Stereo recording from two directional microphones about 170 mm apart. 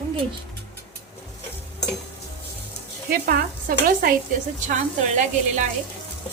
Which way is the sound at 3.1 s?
60° right (ahead or behind).